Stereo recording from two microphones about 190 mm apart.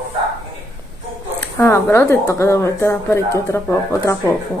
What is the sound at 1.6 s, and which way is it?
Speech, 15° left (ahead or behind).